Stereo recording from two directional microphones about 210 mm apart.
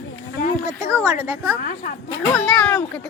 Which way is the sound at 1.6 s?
45° left (ahead or behind).